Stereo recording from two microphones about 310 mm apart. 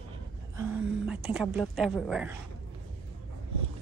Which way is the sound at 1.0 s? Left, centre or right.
Centre.